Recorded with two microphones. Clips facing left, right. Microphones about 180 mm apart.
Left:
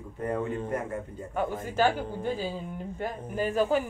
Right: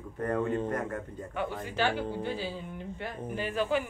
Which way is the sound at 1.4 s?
45° left (ahead or behind).